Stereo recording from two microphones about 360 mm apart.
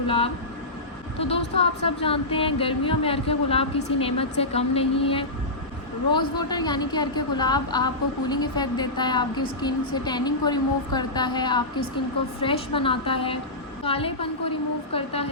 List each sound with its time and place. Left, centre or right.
1.2 s speech: centre